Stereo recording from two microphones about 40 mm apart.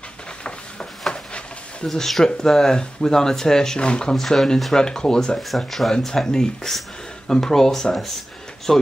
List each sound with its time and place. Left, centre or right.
1.1 s a sound: centre
1.9 s speech: centre
3.8 s speech: left
4.1 s speech: centre
5.7 s speech: centre
6.2 s speech: centre